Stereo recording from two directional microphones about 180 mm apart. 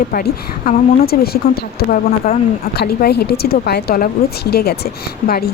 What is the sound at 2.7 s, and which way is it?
Speech, 60° left (ahead or behind).